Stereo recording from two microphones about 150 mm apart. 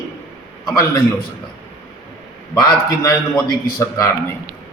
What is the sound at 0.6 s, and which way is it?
Speech, 20° left (ahead or behind).